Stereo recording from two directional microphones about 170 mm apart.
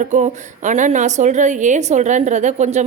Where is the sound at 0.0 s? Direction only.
45° right (ahead or behind).